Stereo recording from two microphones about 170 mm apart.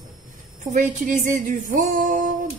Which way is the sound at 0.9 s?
50° right (ahead or behind).